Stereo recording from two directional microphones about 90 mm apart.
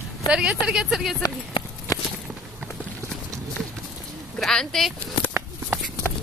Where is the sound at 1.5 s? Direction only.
70° left (ahead or behind).